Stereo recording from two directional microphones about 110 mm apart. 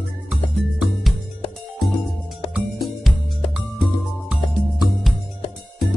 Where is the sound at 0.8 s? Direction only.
Centre (ahead or behind).